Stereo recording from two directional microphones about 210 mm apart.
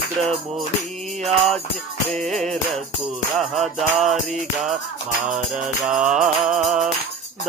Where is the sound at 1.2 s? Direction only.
Centre (ahead or behind).